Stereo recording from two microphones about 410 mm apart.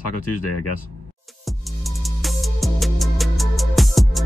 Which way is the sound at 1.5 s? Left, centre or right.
Centre.